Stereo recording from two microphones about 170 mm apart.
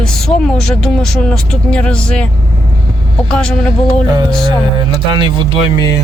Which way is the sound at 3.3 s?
5° left (ahead or behind).